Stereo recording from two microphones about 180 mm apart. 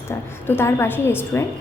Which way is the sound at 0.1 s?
15° left (ahead or behind).